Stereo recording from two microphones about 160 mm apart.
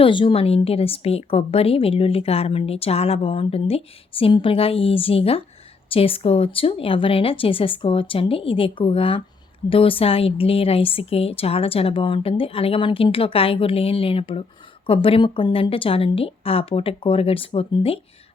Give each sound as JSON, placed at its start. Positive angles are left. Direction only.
{"t": 0.0, "sound": "a woman's voice", "side_deg": 30}